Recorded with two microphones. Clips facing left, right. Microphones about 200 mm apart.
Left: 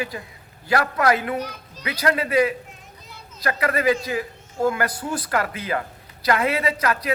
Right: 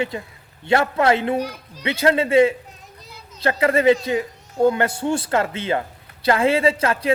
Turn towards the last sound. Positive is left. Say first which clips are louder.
# right 4 dB
turn(degrees=-25)  # may be behind; listen again after turning